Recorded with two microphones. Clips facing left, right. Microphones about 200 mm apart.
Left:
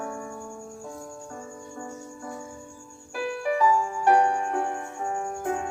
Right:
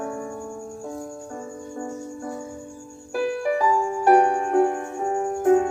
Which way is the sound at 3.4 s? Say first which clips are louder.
Left 2 dB; 35° right (ahead or behind).